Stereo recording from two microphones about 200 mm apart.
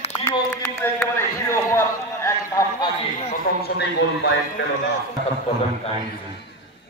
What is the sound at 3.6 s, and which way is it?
Speech, 60° left (ahead or behind).